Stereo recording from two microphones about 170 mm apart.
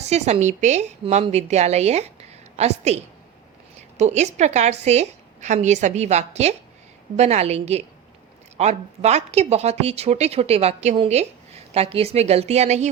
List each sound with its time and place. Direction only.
0.0 s speech: 40° right (ahead or behind)